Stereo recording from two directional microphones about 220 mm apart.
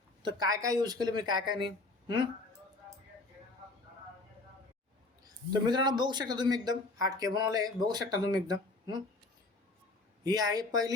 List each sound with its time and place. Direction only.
0.2 s speech: 20° right (ahead or behind)
5.6 s speech: 20° right (ahead or behind)
10.2 s speech: 15° right (ahead or behind)